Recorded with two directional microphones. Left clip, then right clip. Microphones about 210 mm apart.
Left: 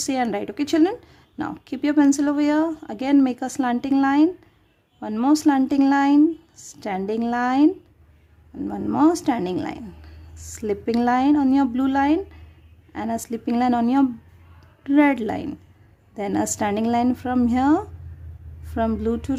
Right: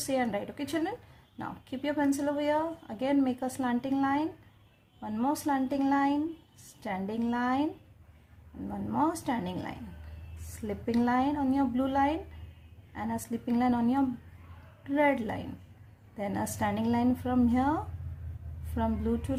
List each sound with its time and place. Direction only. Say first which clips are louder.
0.1 s speech: left 6 dB; 50° left (ahead or behind)
8.7 s speech: left 10 dB; 45° left (ahead or behind)